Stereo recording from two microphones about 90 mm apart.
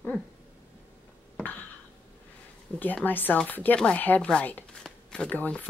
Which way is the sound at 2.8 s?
20° left (ahead or behind).